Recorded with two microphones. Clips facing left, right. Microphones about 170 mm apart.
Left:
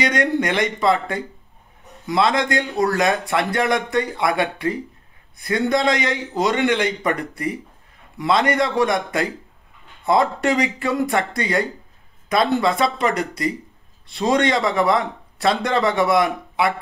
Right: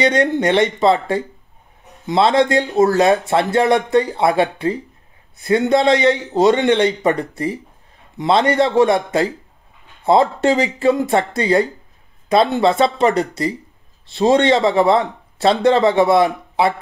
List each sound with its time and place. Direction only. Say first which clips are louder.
0.0 s a man's voice: right 4 dB; 30° right (ahead or behind)